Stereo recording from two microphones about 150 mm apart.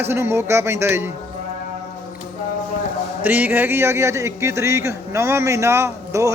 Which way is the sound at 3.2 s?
10° right (ahead or behind).